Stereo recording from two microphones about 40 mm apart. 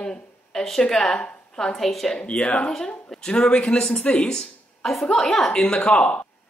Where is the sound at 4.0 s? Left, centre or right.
Left.